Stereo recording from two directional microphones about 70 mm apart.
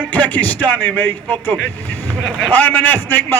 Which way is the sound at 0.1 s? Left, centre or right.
Left.